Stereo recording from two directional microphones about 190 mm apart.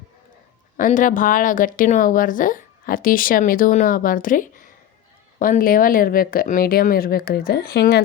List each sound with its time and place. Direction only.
0.8 s speech: 45° left (ahead or behind)